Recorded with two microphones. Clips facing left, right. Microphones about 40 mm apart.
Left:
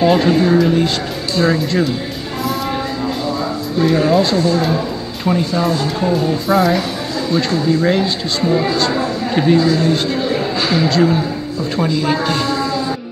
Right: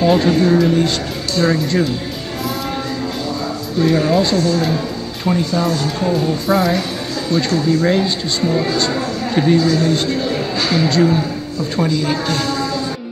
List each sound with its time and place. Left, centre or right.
0.1 s a woman's voice: centre
3.8 s a woman's voice: centre